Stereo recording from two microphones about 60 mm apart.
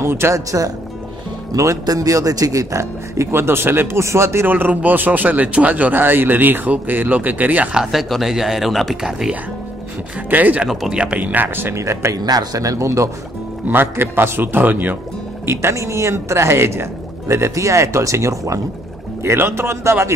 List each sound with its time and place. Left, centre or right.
0.0 s speech: right
1.5 s speech: right
4.5 s speech: right
7.8 s speech: centre
10.3 s speech: right
10.9 s speech: centre
11.1 s a man's voice: right
11.7 s speech: right
12.3 s speech: right
13.7 s a man's voice: right
15.4 s speech: right
19.2 s speech: right